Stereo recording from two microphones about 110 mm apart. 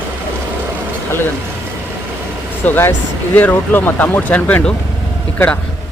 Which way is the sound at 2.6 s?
20° left (ahead or behind).